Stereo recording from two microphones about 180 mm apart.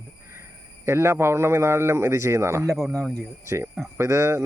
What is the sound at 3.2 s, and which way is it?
A man's voice, 15° right (ahead or behind).